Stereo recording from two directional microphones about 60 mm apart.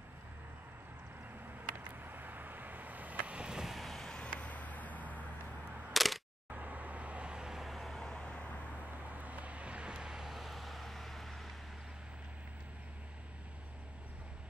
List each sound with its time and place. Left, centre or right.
1.9 s vehicle: right; by 4.3 s centre
4.4 s a sound: left
5.9 s single-lens reflex camera: centre
6.5 s vehicle: right; by 8.5 s centre
9.1 s vehicle: right; by 11.5 s centre